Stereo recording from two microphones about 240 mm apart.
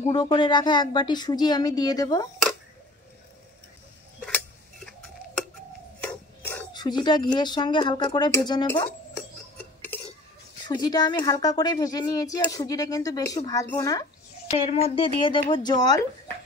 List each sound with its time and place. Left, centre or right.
0.0 s speech: centre
6.0 s mechanisms: centre
6.7 s speech: centre
10.7 s speech: centre
14.7 s speech: left